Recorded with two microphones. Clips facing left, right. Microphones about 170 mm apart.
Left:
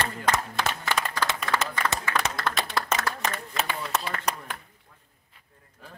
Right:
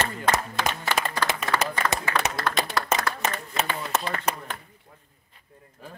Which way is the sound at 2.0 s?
25° right (ahead or behind).